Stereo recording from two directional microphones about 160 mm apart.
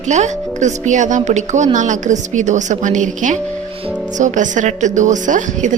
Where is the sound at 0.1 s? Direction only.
50° right (ahead or behind).